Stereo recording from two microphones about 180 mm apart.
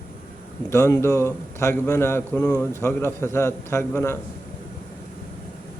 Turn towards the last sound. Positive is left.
turn(degrees=15)  # may be behind; listen again after turning